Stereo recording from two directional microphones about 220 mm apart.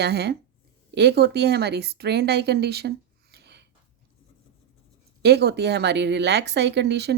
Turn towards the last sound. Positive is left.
turn(degrees=-50)  # may be behind; listen again after turning